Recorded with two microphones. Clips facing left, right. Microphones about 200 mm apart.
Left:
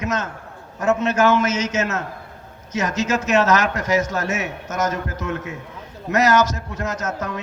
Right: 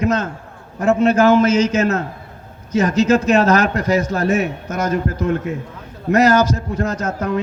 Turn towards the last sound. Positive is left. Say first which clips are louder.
# right 6 dB
turn(degrees=-35)  # may be behind; listen again after turning